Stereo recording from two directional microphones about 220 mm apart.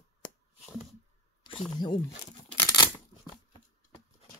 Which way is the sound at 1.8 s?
20° left (ahead or behind).